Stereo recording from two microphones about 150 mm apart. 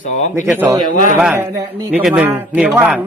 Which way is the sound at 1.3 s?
20° right (ahead or behind).